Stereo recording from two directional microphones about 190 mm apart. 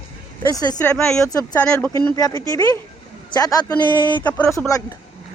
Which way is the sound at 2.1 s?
20° left (ahead or behind).